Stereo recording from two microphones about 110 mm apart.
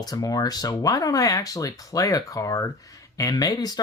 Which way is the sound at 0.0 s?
35° left (ahead or behind).